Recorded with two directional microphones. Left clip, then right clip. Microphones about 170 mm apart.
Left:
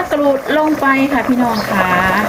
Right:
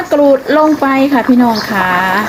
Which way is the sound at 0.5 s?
60° right (ahead or behind).